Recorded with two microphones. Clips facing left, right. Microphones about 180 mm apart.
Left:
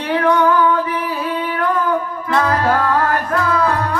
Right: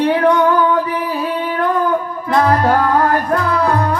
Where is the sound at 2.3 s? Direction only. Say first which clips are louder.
Right 3 dB; 35° right (ahead or behind).